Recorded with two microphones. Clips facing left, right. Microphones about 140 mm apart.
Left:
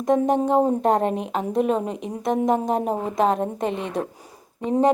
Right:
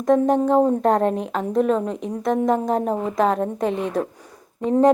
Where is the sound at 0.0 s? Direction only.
15° left (ahead or behind).